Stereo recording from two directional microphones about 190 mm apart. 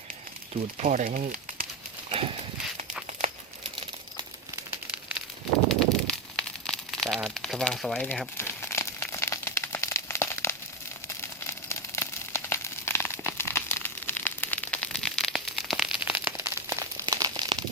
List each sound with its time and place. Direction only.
0.8 s speech: 40° right (ahead or behind)
5.6 s a sound: 5° left (ahead or behind)
11.4 s crumpling: 15° left (ahead or behind); by 17.6 s 20° right (ahead or behind)